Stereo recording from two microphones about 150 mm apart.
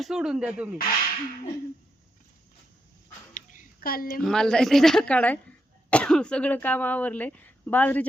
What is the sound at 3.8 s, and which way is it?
Speech, 75° left (ahead or behind).